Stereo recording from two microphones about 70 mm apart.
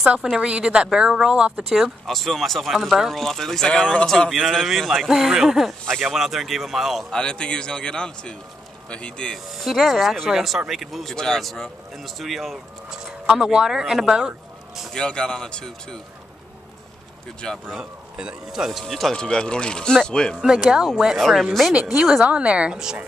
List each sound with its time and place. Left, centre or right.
0.1 s speech: centre
4.6 s speech: centre
7.1 s speech: centre
9.6 s speech: centre
14.9 s speech: centre
17.6 s speech: centre
20.3 s speech: centre
22.2 s speech: centre